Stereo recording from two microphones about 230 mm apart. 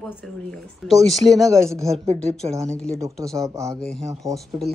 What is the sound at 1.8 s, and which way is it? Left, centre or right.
Speech, right.